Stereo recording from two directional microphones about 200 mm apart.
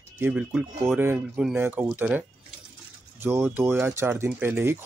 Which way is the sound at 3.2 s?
10° right (ahead or behind).